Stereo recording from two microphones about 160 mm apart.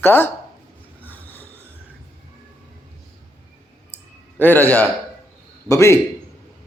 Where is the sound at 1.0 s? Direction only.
10° left (ahead or behind).